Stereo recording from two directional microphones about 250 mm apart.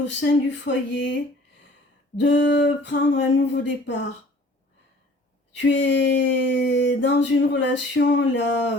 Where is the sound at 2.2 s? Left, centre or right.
Left.